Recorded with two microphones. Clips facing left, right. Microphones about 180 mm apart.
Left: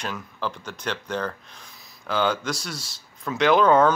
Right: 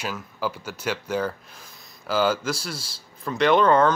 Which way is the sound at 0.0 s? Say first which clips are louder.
Right 1 dB; 5° right (ahead or behind).